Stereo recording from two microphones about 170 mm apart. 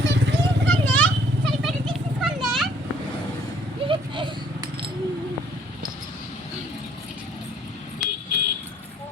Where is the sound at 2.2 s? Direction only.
Centre (ahead or behind).